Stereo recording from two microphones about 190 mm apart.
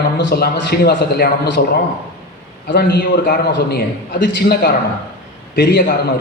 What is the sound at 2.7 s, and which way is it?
A man's voice, 55° left (ahead or behind).